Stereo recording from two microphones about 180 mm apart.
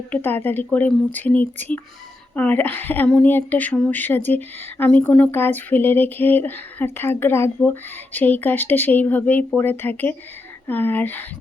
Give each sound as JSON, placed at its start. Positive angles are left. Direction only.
{"t": 0.1, "sound": "speech", "side_deg": 10}